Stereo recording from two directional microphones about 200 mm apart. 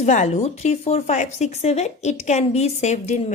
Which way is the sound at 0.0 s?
35° left (ahead or behind).